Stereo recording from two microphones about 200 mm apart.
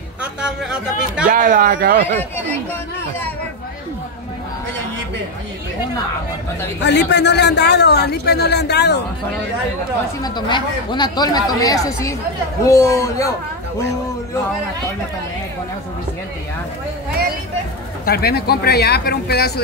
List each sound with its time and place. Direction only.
0.2 s speech: 5° right (ahead or behind)
1.3 s speech: 40° right (ahead or behind)
6.8 s a man's voice: 60° left (ahead or behind)
10.2 s speech: 20° left (ahead or behind)
18.0 s speech: 50° left (ahead or behind)